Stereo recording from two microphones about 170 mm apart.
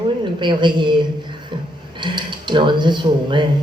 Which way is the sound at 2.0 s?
25° right (ahead or behind).